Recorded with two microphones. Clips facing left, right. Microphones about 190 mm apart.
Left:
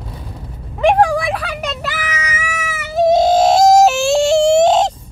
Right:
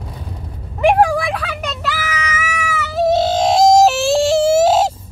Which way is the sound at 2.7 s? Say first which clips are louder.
Left 3 dB; 20° left (ahead or behind).